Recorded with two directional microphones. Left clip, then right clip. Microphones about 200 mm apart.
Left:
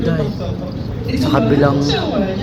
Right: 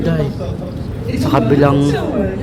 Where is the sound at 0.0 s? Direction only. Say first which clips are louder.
Right 1 dB; 15° right (ahead or behind).